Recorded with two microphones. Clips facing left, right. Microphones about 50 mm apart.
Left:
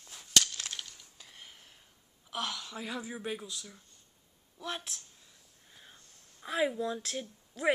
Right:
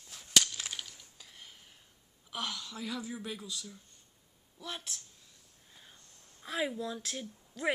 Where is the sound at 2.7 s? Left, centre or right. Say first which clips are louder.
Even; centre.